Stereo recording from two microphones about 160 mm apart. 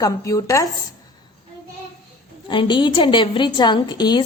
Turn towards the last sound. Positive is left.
turn(degrees=25)  # may be behind; listen again after turning